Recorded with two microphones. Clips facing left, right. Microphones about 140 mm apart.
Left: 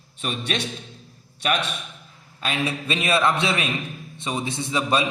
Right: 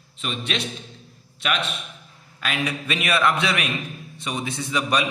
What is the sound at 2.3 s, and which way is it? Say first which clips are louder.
A man's voice: left 1 dB; 30° left (ahead or behind).